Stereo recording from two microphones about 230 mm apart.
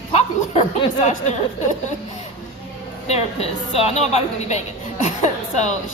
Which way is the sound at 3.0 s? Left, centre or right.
Left.